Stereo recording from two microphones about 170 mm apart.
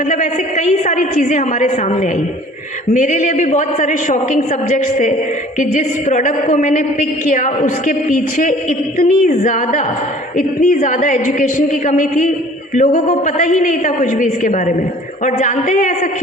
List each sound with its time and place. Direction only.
0.1 s a woman's voice: 45° left (ahead or behind)